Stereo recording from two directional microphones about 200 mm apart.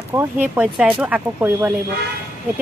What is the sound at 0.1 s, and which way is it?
Speech, 10° right (ahead or behind).